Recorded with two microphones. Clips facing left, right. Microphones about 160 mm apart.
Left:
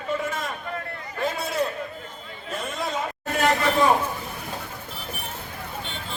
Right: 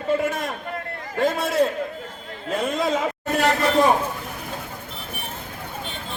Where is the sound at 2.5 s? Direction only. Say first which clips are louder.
Right 7 dB; 90° right.